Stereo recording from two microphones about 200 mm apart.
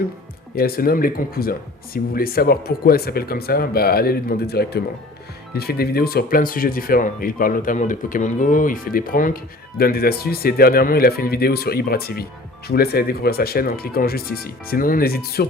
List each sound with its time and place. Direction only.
0.5 s speech: 50° left (ahead or behind)